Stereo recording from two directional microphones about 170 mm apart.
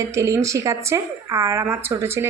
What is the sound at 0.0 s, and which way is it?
Speech, 15° right (ahead or behind).